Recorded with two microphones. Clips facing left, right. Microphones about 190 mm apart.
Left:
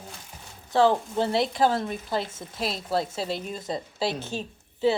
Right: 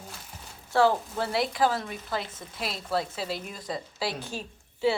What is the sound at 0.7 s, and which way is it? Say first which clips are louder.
Speech: left 2 dB; 20° left (ahead or behind).